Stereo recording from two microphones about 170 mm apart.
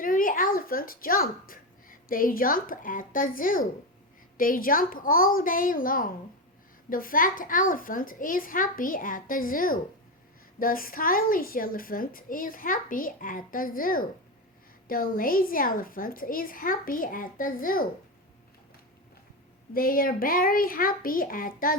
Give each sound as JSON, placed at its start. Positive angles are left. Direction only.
{"t": 0.0, "sound": "a child's voice", "side_deg": 55}
{"t": 19.7, "sound": "a woman's voice", "side_deg": 55}